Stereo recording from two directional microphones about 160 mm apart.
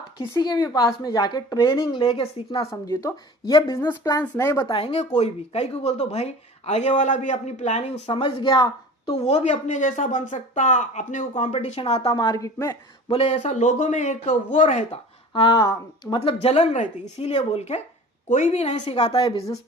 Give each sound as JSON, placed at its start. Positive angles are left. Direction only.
{"t": 0.2, "sound": "speech", "side_deg": 25}
{"t": 2.8, "sound": "speech", "side_deg": 20}
{"t": 4.7, "sound": "speech", "side_deg": 35}
{"t": 12.0, "sound": "speech", "side_deg": 25}
{"t": 13.1, "sound": "speech", "side_deg": 40}
{"t": 15.3, "sound": "speech", "side_deg": 30}
{"t": 16.4, "sound": "speech", "side_deg": 40}